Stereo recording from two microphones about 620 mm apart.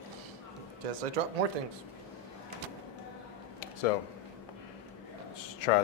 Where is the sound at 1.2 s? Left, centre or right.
Right.